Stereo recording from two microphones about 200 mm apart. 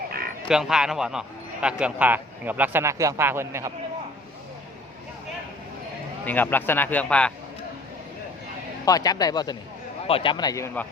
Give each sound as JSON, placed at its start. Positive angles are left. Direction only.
{"t": 0.4, "sound": "a man's voice", "side_deg": -5}
{"t": 6.2, "sound": "a man's voice", "side_deg": 10}
{"t": 8.8, "sound": "a man's voice", "side_deg": 20}